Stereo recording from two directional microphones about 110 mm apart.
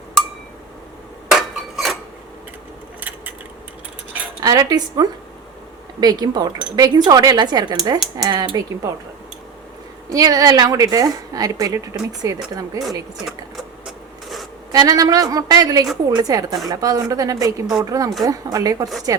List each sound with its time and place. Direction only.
1.4 s a sound: centre (ahead or behind)
3.0 s keys jangling: 15° right (ahead or behind)
4.4 s a woman's voice: 35° right (ahead or behind)
10.1 s a woman's voice: 35° right (ahead or behind)
13.2 s sewing machine: centre (ahead or behind)
14.7 s a woman's voice: 35° right (ahead or behind)